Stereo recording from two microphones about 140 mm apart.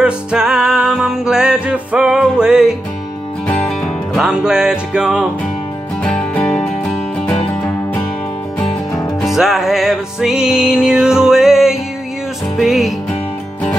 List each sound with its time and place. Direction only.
0.0 s music: 5° right (ahead or behind)
6.0 s music: 10° left (ahead or behind)
9.2 s music: centre (ahead or behind)